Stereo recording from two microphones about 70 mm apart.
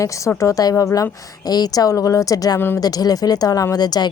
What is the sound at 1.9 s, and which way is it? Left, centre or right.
Speech, left.